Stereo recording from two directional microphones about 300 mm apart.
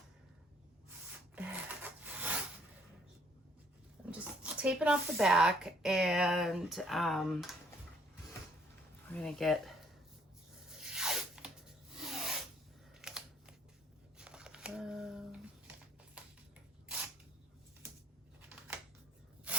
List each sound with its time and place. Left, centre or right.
1.4 s rub: centre
4.1 s speech: centre
9.0 s speech: centre
10.7 s zipper: centre
11.9 s rub: centre
13.0 s a sound: centre
19.5 s a sound: centre